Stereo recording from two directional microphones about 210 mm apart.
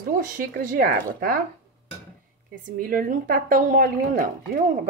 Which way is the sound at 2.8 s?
40° right (ahead or behind).